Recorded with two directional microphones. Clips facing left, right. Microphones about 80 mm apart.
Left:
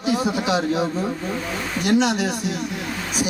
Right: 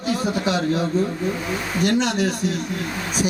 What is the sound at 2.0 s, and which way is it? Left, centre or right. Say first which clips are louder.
Speech: left 1 dB; centre.